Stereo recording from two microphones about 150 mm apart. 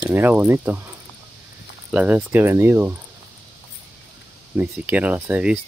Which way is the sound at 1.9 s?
10° right (ahead or behind).